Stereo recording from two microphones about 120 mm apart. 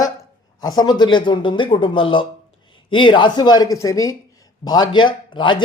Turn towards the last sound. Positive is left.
turn(degrees=40)  # may be behind; listen again after turning